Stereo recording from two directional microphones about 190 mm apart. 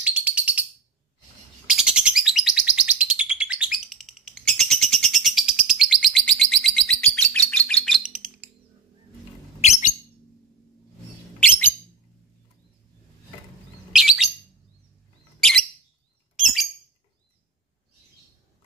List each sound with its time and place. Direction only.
0.0 s bird: 10° right (ahead or behind)
1.7 s bird: 5° right (ahead or behind)
9.6 s bird: 40° left (ahead or behind)
13.9 s bird: centre (ahead or behind)